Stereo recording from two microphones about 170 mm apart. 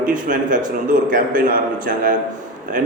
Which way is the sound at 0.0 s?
50° right (ahead or behind).